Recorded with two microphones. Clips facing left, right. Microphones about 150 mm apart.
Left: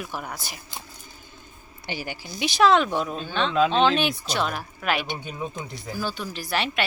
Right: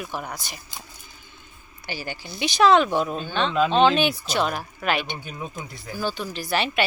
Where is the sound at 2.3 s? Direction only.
Centre (ahead or behind).